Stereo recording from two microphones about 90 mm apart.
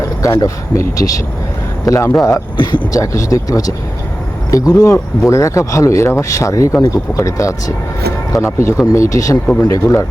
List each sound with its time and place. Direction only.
0.4 s speech: 35° left (ahead or behind)